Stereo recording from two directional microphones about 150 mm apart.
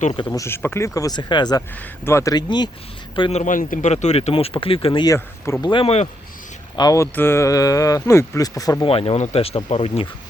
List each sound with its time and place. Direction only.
0.3 s speech: 20° left (ahead or behind); by 3.4 s 35° left (ahead or behind)
3.4 s speech: 60° left (ahead or behind); by 6.1 s 40° left (ahead or behind)
6.7 s speech: 25° left (ahead or behind)
8.9 s speech: 40° left (ahead or behind)